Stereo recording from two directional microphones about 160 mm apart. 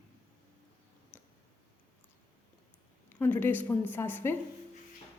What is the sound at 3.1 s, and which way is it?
A woman's voice, 10° left (ahead or behind).